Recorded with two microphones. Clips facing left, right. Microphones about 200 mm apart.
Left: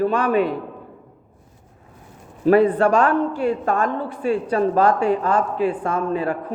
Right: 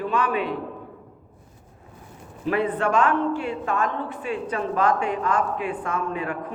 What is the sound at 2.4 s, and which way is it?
A man's voice, 40° left (ahead or behind).